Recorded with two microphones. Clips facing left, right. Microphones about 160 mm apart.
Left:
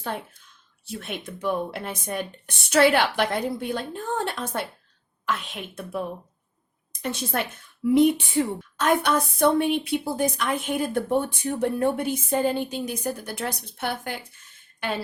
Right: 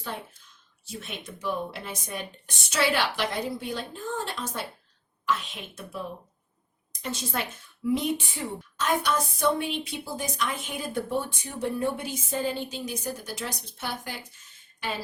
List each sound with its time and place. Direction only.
0.9 s speech: 55° left (ahead or behind)